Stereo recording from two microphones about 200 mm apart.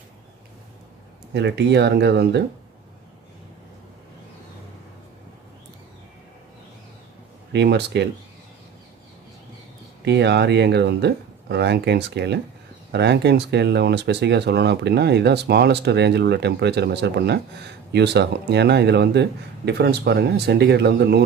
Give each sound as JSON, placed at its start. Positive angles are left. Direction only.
{"t": 1.3, "sound": "speech", "side_deg": -60}
{"t": 7.5, "sound": "speech", "side_deg": -55}
{"t": 10.0, "sound": "speech", "side_deg": -60}